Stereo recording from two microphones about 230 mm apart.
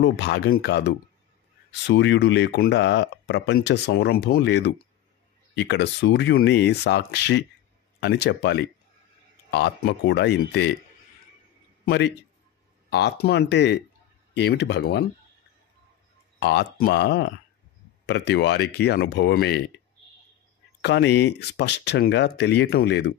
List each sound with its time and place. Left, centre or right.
0.0 s speech: left
11.8 s a man's voice: left
16.3 s speech: left
20.8 s speech: left